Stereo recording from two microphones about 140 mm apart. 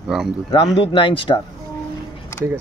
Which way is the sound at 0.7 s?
40° left (ahead or behind).